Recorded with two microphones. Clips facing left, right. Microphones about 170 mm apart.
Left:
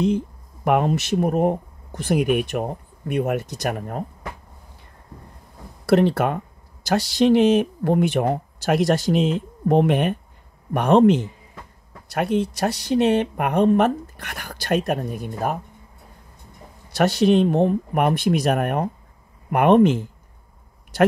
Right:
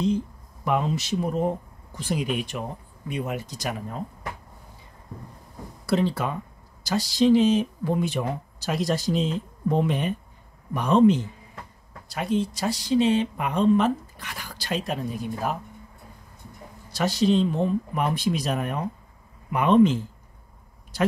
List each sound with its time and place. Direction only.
0.7 s speech: 60° left (ahead or behind)
5.9 s speech: 65° left (ahead or behind)
16.9 s speech: 65° left (ahead or behind)